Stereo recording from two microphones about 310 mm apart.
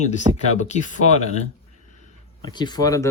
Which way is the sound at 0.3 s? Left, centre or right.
Centre.